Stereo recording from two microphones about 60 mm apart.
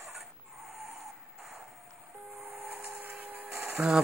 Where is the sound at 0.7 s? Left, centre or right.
Centre.